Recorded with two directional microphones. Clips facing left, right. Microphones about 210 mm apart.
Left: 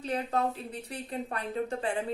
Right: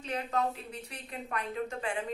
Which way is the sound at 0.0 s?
35° left (ahead or behind).